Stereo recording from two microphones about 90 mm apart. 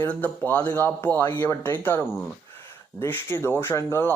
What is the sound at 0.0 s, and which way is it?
Speech, 20° left (ahead or behind).